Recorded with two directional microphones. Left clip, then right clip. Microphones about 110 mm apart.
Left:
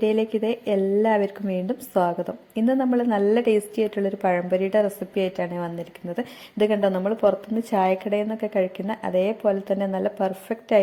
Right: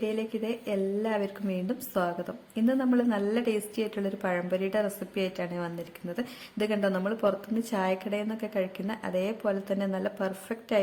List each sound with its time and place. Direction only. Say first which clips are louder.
0.0 s a woman's voice: left 9 dB; 45° left (ahead or behind); by 10.8 s 25° left (ahead or behind)